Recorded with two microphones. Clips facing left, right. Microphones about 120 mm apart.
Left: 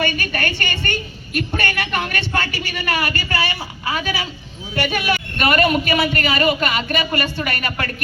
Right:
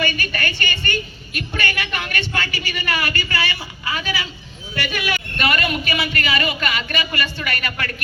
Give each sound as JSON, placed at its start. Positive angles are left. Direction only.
{"t": 0.2, "sound": "speech", "side_deg": 50}